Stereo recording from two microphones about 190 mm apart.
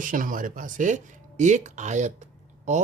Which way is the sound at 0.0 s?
45° right (ahead or behind).